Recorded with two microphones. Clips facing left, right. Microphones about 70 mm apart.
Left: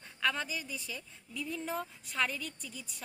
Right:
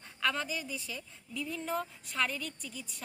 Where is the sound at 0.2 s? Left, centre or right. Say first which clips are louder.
Right 1 dB; centre.